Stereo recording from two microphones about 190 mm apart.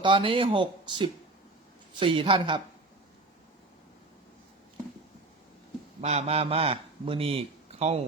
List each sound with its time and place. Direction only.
0.0 s speech: 25° right (ahead or behind)
6.0 s speech: 35° right (ahead or behind)